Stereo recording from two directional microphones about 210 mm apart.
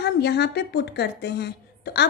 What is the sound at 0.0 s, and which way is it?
Speech, 50° left (ahead or behind).